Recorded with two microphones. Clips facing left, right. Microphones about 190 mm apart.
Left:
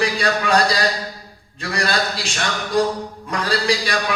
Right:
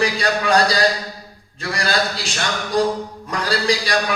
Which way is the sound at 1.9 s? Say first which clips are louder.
Right 1 dB; 35° right (ahead or behind).